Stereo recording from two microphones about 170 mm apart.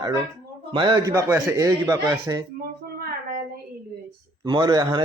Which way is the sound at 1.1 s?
15° right (ahead or behind).